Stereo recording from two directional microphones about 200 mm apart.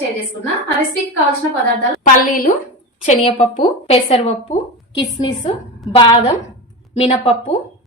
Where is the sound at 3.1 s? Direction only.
35° left (ahead or behind).